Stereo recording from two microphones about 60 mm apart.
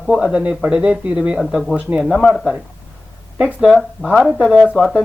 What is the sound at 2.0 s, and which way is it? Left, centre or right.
Speech, centre.